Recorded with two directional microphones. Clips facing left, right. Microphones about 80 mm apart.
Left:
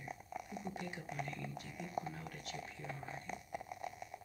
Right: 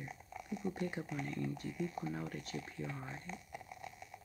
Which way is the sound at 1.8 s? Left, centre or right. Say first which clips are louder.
Right 2 dB; centre.